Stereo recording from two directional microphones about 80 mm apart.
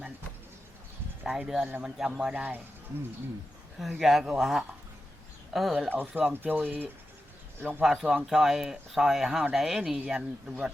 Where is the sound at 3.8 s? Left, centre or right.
Centre.